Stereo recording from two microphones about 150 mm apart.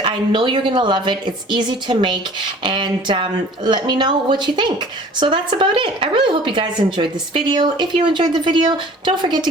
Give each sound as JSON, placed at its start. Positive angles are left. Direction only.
{"t": 0.0, "sound": "a woman's voice", "side_deg": -35}